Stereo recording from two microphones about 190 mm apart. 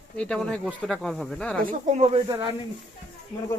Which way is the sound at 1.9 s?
35° right (ahead or behind).